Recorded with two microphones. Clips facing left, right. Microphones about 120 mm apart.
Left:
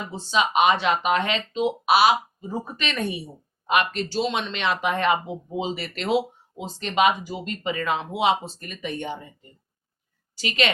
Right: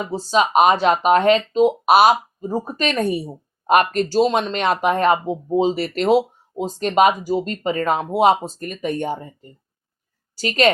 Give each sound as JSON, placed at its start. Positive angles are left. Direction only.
{"t": 0.0, "sound": "a woman's voice", "side_deg": -40}